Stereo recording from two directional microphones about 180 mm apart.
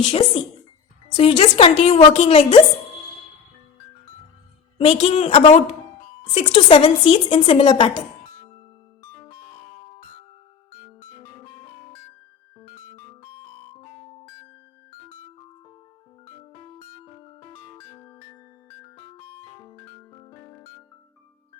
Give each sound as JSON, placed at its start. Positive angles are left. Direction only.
{"t": 0.0, "sound": "a woman's voice", "side_deg": 30}
{"t": 4.8, "sound": "a woman's voice", "side_deg": 35}
{"t": 16.4, "sound": "music", "side_deg": 25}